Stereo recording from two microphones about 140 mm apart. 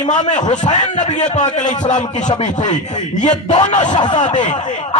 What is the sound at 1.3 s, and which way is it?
A man's voice, 60° left (ahead or behind).